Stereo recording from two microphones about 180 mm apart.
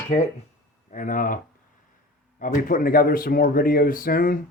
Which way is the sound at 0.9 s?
45° left (ahead or behind).